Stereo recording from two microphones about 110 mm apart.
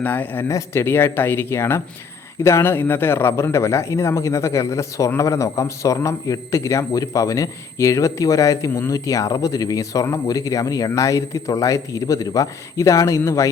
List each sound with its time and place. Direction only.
0.0 s a man's voice: 15° left (ahead or behind)